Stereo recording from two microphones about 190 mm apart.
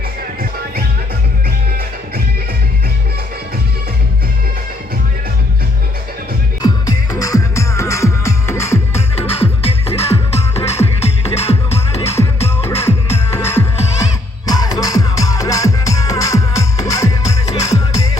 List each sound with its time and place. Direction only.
6.6 s music: 20° left (ahead or behind)
9.2 s music: 30° left (ahead or behind)
12.7 s music: 35° left (ahead or behind)
13.3 s music: 15° left (ahead or behind)